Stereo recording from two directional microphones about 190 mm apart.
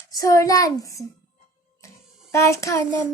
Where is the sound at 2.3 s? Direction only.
15° left (ahead or behind).